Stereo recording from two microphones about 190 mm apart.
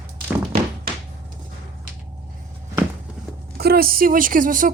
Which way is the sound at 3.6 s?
55° right (ahead or behind).